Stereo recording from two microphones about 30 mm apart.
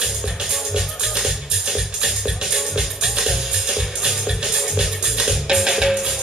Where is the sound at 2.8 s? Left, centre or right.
Centre.